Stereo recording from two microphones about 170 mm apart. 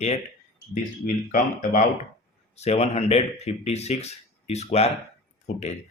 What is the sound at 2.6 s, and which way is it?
Speech, 40° left (ahead or behind).